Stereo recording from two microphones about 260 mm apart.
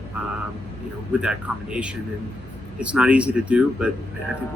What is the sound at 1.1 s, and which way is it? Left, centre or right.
Speech, centre.